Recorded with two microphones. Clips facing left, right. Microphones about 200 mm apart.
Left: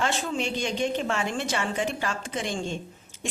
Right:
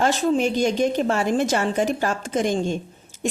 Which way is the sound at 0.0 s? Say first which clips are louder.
Right 8 dB; 40° right (ahead or behind).